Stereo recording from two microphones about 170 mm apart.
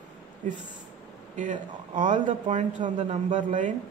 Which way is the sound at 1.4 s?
50° right (ahead or behind).